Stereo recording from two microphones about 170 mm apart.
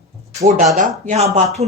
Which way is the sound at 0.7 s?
50° right (ahead or behind).